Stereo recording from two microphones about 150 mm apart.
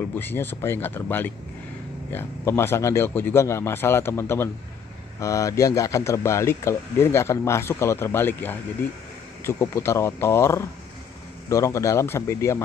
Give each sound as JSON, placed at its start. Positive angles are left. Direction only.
{"t": 0.1, "sound": "speech", "side_deg": 15}